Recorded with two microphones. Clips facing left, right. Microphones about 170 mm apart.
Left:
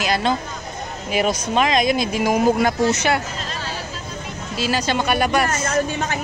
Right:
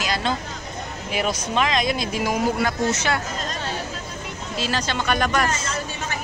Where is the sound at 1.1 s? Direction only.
15° left (ahead or behind).